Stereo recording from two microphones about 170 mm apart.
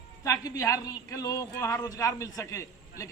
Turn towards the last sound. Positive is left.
turn(degrees=20)  # may be behind; listen again after turning